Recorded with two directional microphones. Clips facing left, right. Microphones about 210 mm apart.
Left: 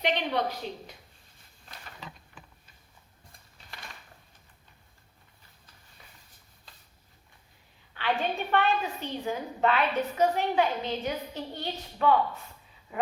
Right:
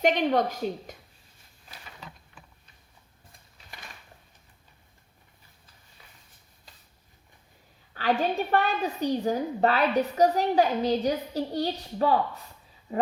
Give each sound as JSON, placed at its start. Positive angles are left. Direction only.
{"t": 0.0, "sound": "a woman's voice", "side_deg": -45}
{"t": 7.9, "sound": "a woman's voice", "side_deg": -40}
{"t": 12.9, "sound": "a sound", "side_deg": -35}